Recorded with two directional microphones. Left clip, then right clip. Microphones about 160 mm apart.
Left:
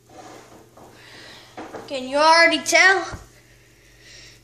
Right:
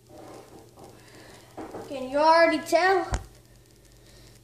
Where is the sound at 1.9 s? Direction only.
5° left (ahead or behind).